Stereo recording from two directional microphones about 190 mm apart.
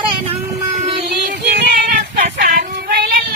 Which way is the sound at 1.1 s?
55° right (ahead or behind).